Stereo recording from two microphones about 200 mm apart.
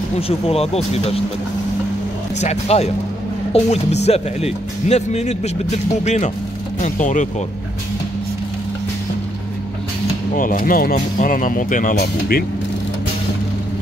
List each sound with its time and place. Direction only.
0.5 s speech: 30° left (ahead or behind)
2.4 s speech: 35° left (ahead or behind)
10.3 s speech: 40° left (ahead or behind)